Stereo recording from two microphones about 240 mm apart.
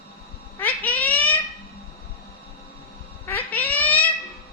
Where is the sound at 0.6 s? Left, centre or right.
Centre.